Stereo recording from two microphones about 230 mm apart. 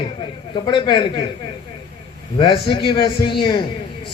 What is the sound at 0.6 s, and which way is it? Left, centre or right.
Speech, left.